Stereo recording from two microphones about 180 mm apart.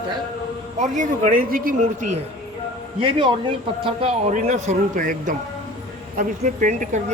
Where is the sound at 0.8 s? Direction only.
40° right (ahead or behind).